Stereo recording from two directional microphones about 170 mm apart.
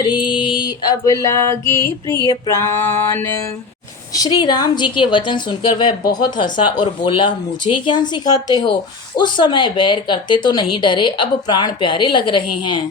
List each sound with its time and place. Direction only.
0.0 s female singing: 25° left (ahead or behind)
2.2 s a sound: 20° left (ahead or behind)
4.1 s a woman's voice: 25° left (ahead or behind)